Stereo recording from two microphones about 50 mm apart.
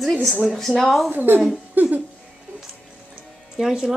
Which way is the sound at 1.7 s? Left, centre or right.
Right.